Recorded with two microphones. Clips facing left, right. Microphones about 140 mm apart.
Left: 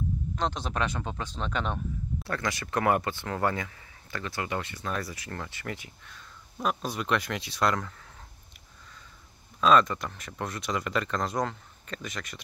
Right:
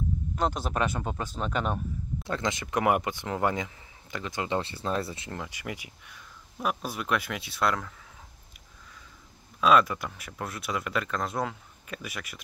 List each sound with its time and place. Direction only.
0.4 s speech: 5° right (ahead or behind)
2.2 s speech: 20° right (ahead or behind)
5.4 s speech: 15° right (ahead or behind)
9.6 s speech: 5° right (ahead or behind)